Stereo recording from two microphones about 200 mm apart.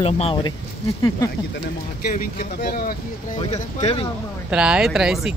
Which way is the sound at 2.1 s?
45° left (ahead or behind).